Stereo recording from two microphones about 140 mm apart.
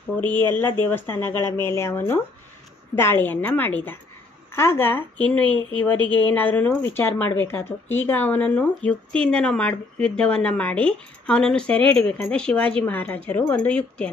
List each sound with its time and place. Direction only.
0.2 s speech: 15° left (ahead or behind)